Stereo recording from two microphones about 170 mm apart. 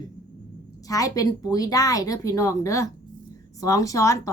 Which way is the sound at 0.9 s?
20° left (ahead or behind).